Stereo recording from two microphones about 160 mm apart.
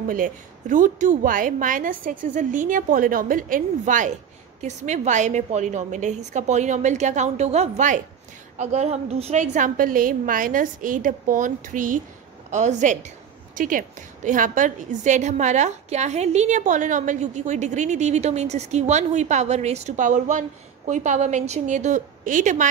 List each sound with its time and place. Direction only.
0.1 s a woman's voice: 55° right (ahead or behind)